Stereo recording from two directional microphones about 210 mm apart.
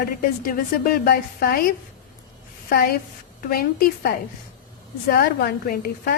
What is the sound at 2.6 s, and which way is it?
A woman's voice, 45° left (ahead or behind).